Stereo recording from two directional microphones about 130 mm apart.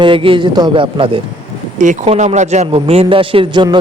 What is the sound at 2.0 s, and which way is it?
A man's voice, 55° right (ahead or behind).